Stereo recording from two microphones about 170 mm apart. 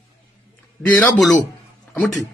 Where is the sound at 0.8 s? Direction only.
10° left (ahead or behind).